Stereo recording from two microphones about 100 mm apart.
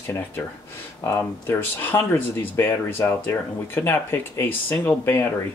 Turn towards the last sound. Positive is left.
turn(degrees=20)  # may be behind; listen again after turning